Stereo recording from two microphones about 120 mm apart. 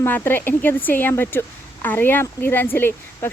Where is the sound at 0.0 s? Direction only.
15° left (ahead or behind).